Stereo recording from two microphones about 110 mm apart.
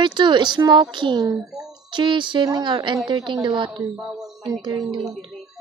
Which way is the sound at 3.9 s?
5° right (ahead or behind).